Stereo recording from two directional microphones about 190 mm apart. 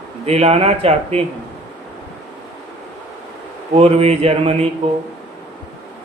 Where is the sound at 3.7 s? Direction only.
30° right (ahead or behind).